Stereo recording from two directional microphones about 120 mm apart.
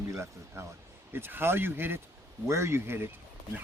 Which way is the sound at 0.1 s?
20° right (ahead or behind).